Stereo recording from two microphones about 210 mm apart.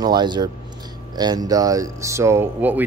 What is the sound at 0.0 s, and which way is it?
Speech, 20° right (ahead or behind).